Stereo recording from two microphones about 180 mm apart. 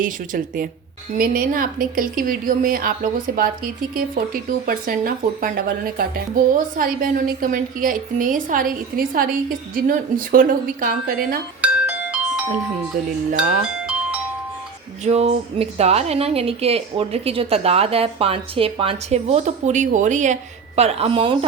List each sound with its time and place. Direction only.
0.0 s a woman's voice: 50° right (ahead or behind)
11.6 s music: 5° right (ahead or behind)
13.6 s music: 5° right (ahead or behind)
15.0 s a woman's voice: 35° right (ahead or behind)